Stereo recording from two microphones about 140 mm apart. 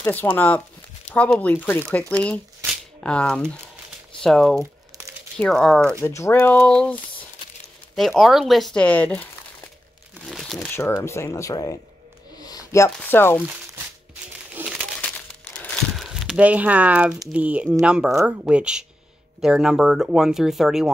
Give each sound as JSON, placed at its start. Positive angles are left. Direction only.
{"t": 0.0, "sound": "speech", "side_deg": 15}
{"t": 4.6, "sound": "crumpling", "side_deg": -20}
{"t": 5.4, "sound": "speech", "side_deg": 5}
{"t": 6.0, "sound": "speech", "side_deg": 20}
{"t": 10.2, "sound": "crumpling", "side_deg": 0}
{"t": 10.7, "sound": "speech", "side_deg": 20}
{"t": 12.4, "sound": "a sound", "side_deg": 25}
{"t": 14.5, "sound": "crumpling", "side_deg": -10}
{"t": 14.9, "sound": "crumpling", "side_deg": 5}
{"t": 16.0, "sound": "speech", "side_deg": 0}